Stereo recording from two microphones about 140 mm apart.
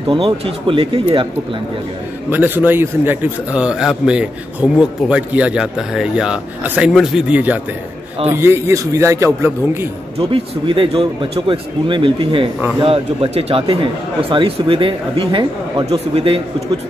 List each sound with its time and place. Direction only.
0.1 s speech: 40° right (ahead or behind)
2.2 s a man's voice: 15° right (ahead or behind)
10.1 s speech: 40° right (ahead or behind)